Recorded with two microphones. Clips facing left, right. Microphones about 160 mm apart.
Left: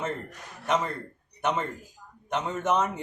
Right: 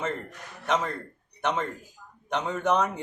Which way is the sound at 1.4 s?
5° left (ahead or behind).